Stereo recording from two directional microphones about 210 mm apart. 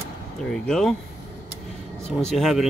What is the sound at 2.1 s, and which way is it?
Speech, centre (ahead or behind).